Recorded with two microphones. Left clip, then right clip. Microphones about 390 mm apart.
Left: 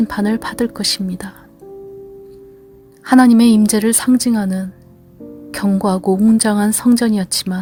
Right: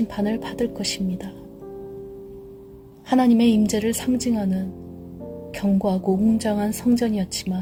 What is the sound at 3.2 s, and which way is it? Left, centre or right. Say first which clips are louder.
Speech: left 7 dB; left.